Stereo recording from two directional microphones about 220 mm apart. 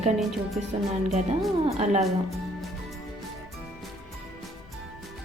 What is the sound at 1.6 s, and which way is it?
Speech, 30° right (ahead or behind).